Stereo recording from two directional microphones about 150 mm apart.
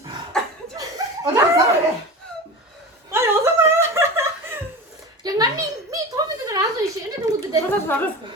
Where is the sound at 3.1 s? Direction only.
15° right (ahead or behind).